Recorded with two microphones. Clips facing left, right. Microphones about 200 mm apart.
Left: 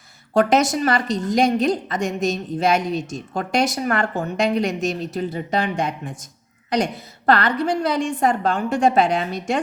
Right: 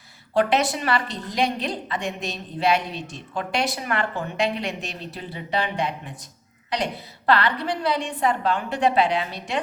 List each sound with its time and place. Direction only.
0.3 s a woman's voice: 45° left (ahead or behind)